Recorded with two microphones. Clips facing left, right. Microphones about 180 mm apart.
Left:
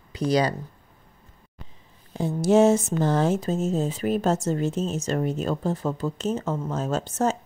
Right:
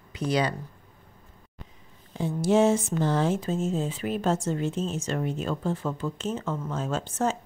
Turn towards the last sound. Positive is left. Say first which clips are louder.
# left 3 dB
turn(degrees=40)  # may be behind; listen again after turning